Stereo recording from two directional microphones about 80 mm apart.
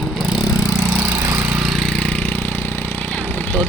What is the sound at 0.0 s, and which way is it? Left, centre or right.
Vehicle, centre.